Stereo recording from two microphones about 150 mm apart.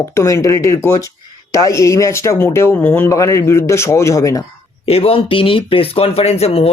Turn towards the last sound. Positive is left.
turn(degrees=45)  # may be behind; listen again after turning